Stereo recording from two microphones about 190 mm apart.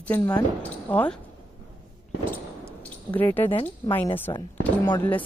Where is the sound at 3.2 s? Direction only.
10° left (ahead or behind).